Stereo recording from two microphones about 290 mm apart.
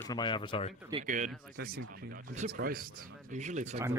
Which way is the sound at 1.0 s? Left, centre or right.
Right.